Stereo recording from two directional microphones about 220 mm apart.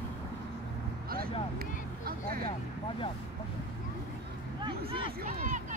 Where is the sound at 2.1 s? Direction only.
40° right (ahead or behind).